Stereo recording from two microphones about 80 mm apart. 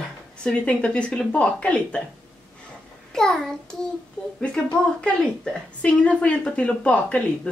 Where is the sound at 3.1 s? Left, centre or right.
Centre.